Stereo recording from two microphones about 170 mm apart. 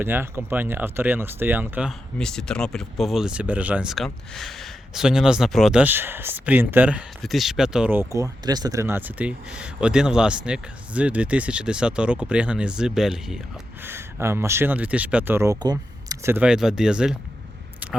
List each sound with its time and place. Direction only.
0.0 s speech: 10° right (ahead or behind)
1.9 s speech: 5° left (ahead or behind)
13.8 s speech: 15° right (ahead or behind)